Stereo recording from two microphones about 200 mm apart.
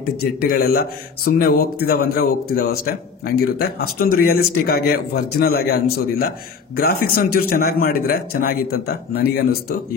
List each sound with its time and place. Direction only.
0.0 s speech: 50° left (ahead or behind)